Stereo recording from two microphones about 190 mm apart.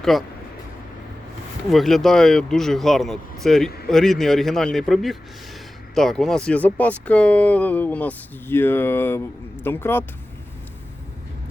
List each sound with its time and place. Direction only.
0.0 s speech: centre (ahead or behind)
1.7 s speech: centre (ahead or behind)